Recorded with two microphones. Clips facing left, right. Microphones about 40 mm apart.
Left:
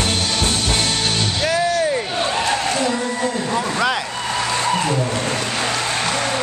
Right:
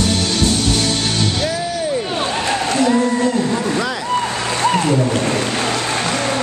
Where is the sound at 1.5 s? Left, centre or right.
Left.